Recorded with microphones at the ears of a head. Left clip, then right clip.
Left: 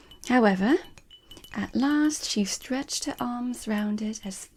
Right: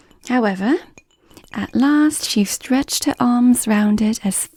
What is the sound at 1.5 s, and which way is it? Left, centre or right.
Speech, right.